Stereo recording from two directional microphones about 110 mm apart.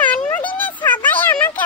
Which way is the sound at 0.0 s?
15° left (ahead or behind).